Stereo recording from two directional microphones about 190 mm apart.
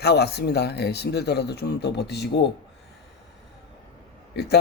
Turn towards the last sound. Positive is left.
turn(degrees=60)  # may be behind; listen again after turning